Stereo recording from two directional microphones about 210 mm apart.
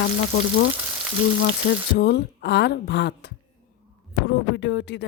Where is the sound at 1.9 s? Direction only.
50° left (ahead or behind).